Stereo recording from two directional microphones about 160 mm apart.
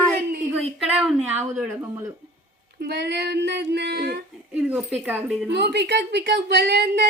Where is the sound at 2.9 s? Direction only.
90° right.